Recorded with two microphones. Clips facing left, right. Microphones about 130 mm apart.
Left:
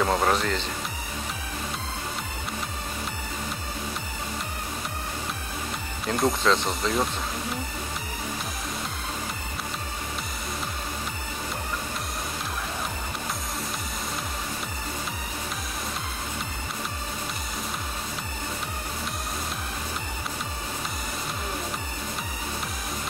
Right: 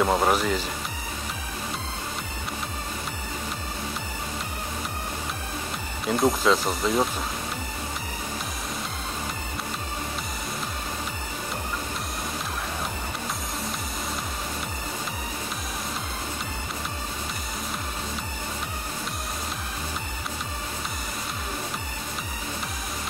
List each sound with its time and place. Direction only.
0.0 s speech: 10° right (ahead or behind)
6.0 s speech: 5° right (ahead or behind)